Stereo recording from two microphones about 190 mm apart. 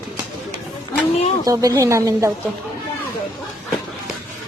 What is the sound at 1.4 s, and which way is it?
Speech, 15° right (ahead or behind).